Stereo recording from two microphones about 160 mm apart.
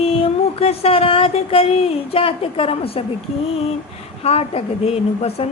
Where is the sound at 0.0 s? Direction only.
40° left (ahead or behind).